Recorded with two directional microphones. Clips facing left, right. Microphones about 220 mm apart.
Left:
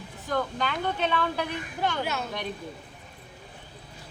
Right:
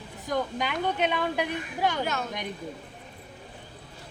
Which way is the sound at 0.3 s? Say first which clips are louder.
Even; 15° right (ahead or behind).